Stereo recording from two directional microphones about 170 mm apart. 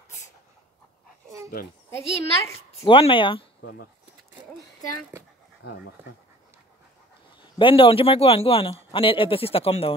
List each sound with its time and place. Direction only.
1.9 s a woman's voice: 15° left (ahead or behind)
2.8 s a man's voice: 35° left (ahead or behind)
3.6 s speech: 75° left (ahead or behind)
7.5 s a man's voice: 30° left (ahead or behind)